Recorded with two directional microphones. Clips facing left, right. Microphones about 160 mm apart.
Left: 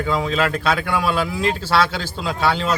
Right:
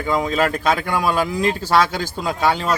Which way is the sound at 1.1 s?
45° right (ahead or behind).